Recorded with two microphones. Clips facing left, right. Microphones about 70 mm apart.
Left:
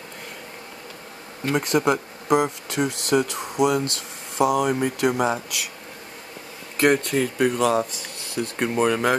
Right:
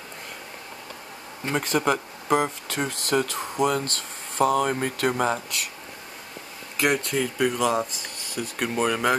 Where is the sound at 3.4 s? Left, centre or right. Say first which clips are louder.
Left 3 dB; centre.